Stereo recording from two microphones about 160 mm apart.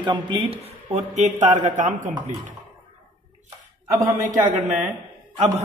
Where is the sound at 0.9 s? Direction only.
45° right (ahead or behind).